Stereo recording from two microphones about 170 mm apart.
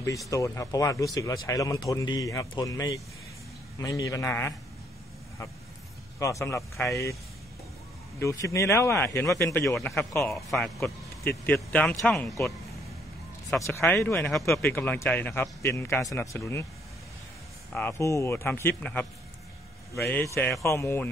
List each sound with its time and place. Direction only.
0.3 s speech: 20° left (ahead or behind)
6.1 s speech: 20° left (ahead or behind)
8.2 s speech: 15° left (ahead or behind)
10.3 s speech: centre (ahead or behind)
10.8 s speech: 10° left (ahead or behind)
13.6 s speech: 15° left (ahead or behind)
17.7 s speech: 15° left (ahead or behind)